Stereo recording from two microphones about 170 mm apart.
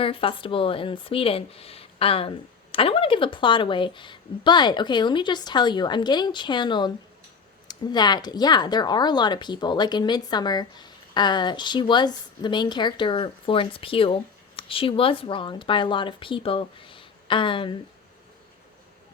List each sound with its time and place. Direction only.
0.0 s speech: 30° left (ahead or behind)